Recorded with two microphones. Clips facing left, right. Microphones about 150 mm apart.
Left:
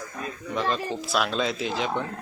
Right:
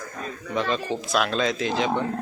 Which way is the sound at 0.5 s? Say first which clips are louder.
Right 2 dB; centre (ahead or behind).